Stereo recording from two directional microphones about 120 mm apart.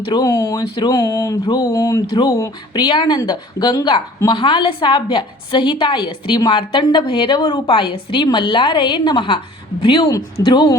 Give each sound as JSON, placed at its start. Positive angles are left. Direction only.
{"t": 0.0, "sound": "a woman's voice", "side_deg": 35}